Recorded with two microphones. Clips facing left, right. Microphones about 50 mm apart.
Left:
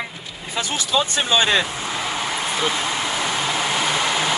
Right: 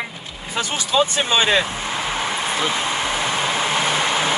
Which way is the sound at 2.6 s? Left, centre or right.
Right.